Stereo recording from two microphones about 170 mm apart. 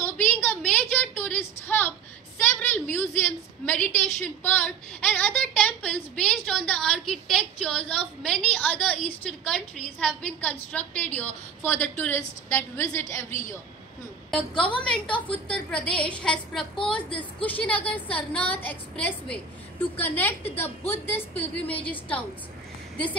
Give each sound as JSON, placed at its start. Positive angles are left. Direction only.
{"t": 0.0, "sound": "a sound", "side_deg": 10}
{"t": 2.3, "sound": "a woman's voice", "side_deg": 10}
{"t": 14.6, "sound": "a woman's voice", "side_deg": 5}